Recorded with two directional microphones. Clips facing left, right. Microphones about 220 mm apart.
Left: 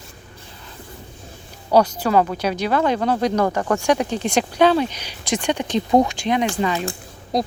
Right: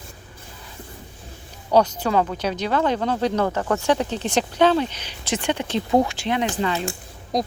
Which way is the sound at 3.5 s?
60° left (ahead or behind).